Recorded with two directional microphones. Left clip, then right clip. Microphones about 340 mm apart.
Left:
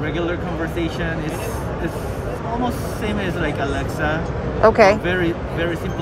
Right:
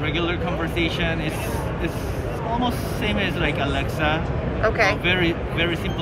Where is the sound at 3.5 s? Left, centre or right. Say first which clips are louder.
Left 1 dB; centre.